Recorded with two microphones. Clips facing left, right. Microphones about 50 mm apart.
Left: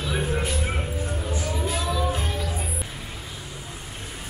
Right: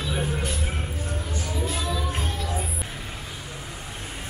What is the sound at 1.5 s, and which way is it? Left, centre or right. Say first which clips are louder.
Music: left 1 dB; centre.